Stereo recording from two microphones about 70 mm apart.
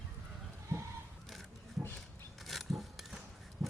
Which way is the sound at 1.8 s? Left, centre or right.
Right.